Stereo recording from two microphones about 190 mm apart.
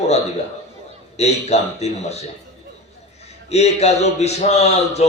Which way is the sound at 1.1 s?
35° left (ahead or behind).